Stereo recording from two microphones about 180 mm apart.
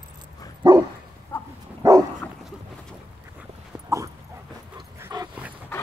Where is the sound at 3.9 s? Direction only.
20° right (ahead or behind).